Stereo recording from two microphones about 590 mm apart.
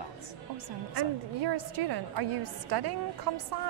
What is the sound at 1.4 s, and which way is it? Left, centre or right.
A woman's voice, right.